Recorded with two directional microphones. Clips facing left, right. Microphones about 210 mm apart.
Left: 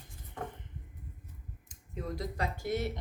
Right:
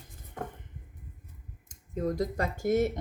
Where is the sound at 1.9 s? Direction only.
45° right (ahead or behind).